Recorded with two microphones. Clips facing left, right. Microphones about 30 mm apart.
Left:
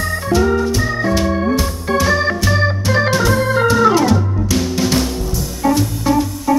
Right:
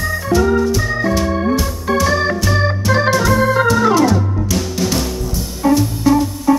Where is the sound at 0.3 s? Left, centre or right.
Centre.